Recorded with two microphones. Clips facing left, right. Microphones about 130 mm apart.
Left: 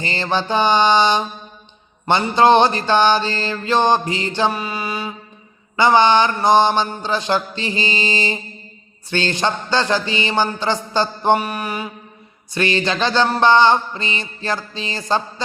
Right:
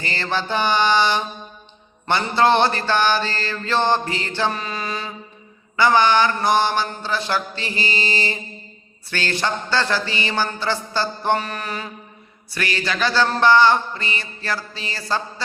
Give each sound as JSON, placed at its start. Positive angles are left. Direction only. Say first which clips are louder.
{"t": 0.0, "sound": "mantra", "louder": "left 3 dB", "side_deg": 20}
{"t": 12.5, "sound": "mantra", "louder": "left 6 dB", "side_deg": 25}